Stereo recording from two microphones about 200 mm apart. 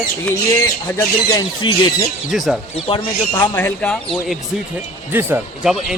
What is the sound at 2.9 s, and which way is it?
Speech, 25° left (ahead or behind).